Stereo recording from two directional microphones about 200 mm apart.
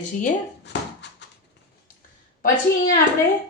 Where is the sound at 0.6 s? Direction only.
60° left (ahead or behind).